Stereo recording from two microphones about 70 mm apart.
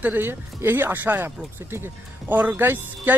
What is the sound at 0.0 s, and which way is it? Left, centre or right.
Speech, right.